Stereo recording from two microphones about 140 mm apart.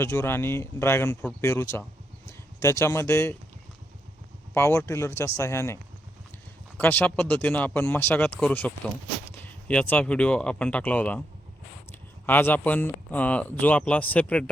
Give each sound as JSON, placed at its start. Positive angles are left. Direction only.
{"t": 0.0, "sound": "speech", "side_deg": 15}
{"t": 4.5, "sound": "speech", "side_deg": 15}